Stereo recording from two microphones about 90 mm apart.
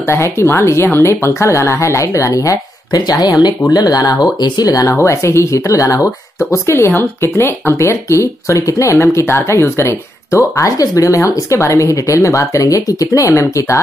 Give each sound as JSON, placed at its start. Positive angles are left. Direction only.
{"t": 0.0, "sound": "speech", "side_deg": 30}